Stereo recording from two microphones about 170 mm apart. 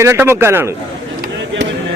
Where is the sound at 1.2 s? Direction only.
90° right.